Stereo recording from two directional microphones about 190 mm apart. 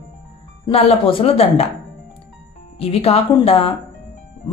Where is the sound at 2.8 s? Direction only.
30° left (ahead or behind).